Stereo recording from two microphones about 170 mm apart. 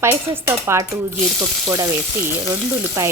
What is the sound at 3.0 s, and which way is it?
Speech, 15° right (ahead or behind).